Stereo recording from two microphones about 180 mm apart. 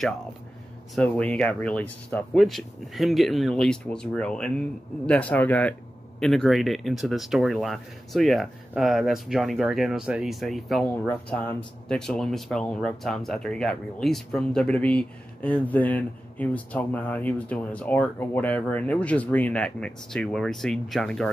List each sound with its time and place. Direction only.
0.9 s speech: 5° left (ahead or behind)